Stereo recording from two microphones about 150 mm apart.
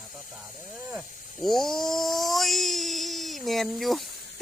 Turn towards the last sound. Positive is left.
turn(degrees=0)  # may be behind; listen again after turning